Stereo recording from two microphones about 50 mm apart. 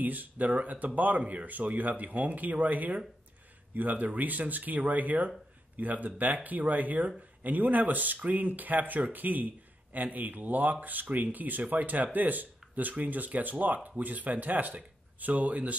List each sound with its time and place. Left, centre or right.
0.0 s speech: right